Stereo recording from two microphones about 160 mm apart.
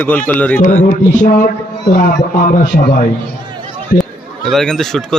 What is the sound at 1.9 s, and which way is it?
A man's voice, 70° left (ahead or behind).